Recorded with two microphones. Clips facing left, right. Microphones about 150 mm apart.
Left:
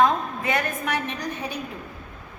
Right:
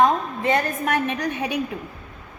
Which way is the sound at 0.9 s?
55° right (ahead or behind).